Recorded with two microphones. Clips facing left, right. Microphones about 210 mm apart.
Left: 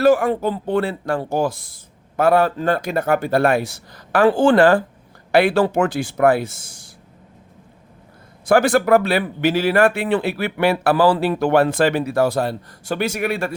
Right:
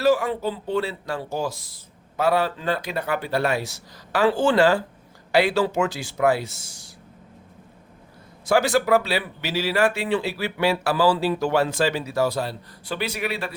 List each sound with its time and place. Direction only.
0.0 s speech: 50° left (ahead or behind)
8.4 s speech: 55° left (ahead or behind)